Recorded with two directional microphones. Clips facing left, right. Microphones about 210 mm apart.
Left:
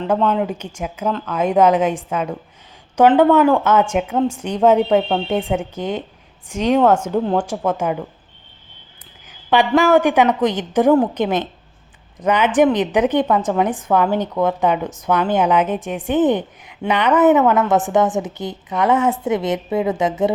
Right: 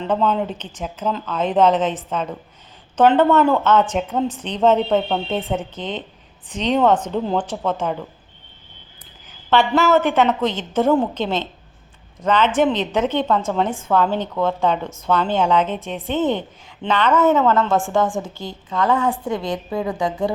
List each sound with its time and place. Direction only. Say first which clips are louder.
0.0 s a woman's voice: left 2 dB; 5° left (ahead or behind)
9.5 s a woman's voice: left 2 dB; 15° left (ahead or behind)